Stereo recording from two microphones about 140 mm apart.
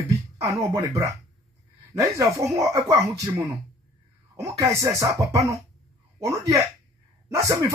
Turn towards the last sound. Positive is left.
turn(degrees=-25)  # may be behind; listen again after turning